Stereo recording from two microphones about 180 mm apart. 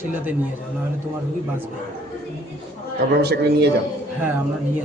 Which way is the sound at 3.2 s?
65° right (ahead or behind).